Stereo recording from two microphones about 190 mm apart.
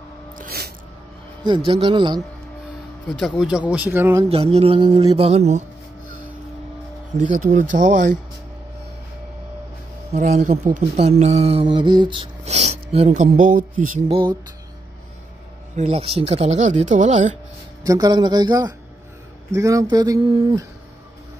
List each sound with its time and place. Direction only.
0.4 s music: 55° right (ahead or behind)
1.4 s speech: 25° right (ahead or behind)
3.1 s speech: centre (ahead or behind)
4.3 s speech: 30° right (ahead or behind)
7.2 s speech: 40° right (ahead or behind)
10.1 s speech: 35° right (ahead or behind)
14.0 s speech: 25° right (ahead or behind)
15.7 s speech: 35° right (ahead or behind)
17.8 s speech: 20° right (ahead or behind)